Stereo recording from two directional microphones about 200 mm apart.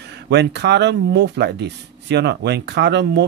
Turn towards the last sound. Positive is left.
turn(degrees=-60)  # may be behind; listen again after turning